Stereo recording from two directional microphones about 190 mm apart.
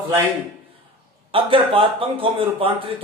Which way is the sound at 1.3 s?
30° right (ahead or behind).